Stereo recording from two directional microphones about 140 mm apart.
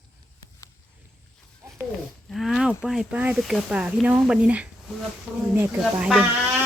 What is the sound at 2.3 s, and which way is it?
Speech, centre (ahead or behind).